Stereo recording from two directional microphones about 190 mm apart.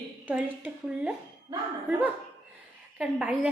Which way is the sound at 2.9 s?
5° right (ahead or behind).